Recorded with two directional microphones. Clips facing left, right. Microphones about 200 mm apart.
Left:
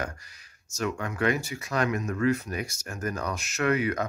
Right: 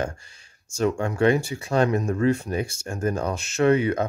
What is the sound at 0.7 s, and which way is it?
Speech, 30° right (ahead or behind).